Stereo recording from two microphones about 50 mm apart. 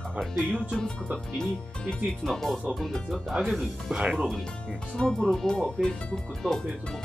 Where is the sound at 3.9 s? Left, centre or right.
Right.